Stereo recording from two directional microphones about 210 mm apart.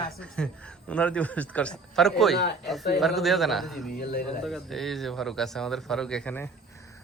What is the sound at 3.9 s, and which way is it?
Speech, 45° left (ahead or behind).